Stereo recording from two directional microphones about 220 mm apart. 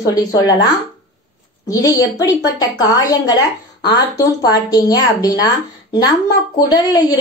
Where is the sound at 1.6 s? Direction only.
15° left (ahead or behind).